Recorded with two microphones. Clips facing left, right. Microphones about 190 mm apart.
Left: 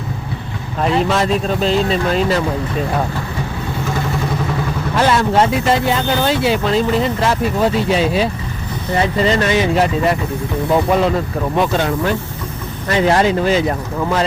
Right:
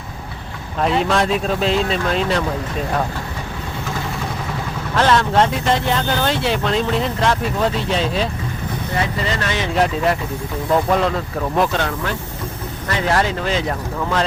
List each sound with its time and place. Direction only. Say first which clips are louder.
0.8 s speech: left 1 dB; centre (ahead or behind)
4.9 s speech: left 1 dB; 10° left (ahead or behind)
9.0 s speech: left 8 dB; 25° left (ahead or behind)
9.5 s speech: left 4 dB; 5° left (ahead or behind)
11.8 s speech: left 5 dB; 15° left (ahead or behind)
13.4 s speech: left 5 dB; 5° left (ahead or behind)